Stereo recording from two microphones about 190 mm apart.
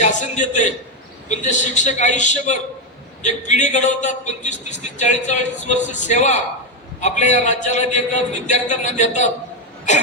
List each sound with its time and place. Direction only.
0.0 s a man's voice: 40° left (ahead or behind)